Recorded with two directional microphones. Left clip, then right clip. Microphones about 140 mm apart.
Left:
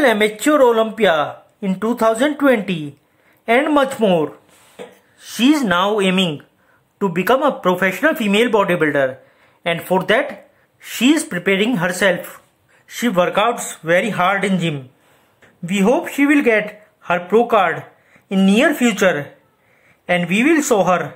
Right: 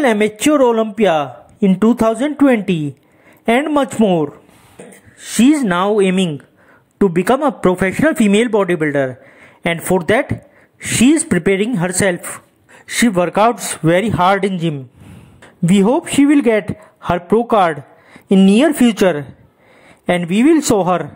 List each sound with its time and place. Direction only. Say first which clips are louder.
0.0 s a man's voice: right 1 dB; 30° right (ahead or behind)
5.2 s a man's voice: right 2 dB; 30° right (ahead or behind); by 14.5 s 50° right (ahead or behind)
15.6 s a man's voice: right 2 dB; 40° right (ahead or behind)